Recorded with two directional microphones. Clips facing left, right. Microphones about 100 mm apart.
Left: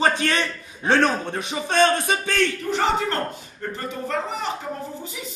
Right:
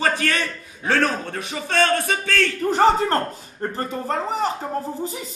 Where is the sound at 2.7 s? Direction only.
40° right (ahead or behind).